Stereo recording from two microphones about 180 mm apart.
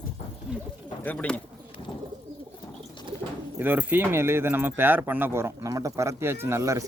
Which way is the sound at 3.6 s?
10° right (ahead or behind).